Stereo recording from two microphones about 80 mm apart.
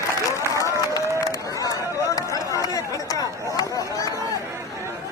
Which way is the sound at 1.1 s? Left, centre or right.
Left.